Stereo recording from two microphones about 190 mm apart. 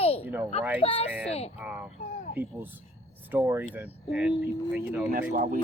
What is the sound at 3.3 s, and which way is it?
Speech, 10° right (ahead or behind).